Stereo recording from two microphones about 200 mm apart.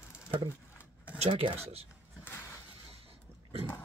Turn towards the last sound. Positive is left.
turn(degrees=-30)  # may be behind; listen again after turning